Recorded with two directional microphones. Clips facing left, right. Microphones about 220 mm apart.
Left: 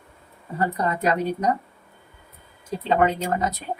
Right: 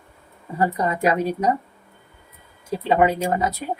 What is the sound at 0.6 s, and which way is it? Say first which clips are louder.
Speech: right 3 dB; 10° right (ahead or behind).